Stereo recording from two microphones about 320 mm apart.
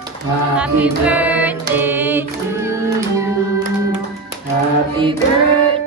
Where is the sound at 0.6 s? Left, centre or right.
Centre.